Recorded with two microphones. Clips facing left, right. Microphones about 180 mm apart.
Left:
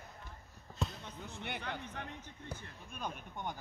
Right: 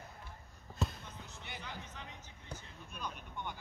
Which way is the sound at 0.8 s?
Centre (ahead or behind).